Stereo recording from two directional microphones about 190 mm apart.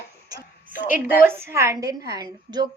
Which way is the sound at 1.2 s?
15° right (ahead or behind).